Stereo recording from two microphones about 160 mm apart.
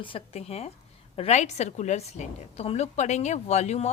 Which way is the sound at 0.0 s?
35° left (ahead or behind).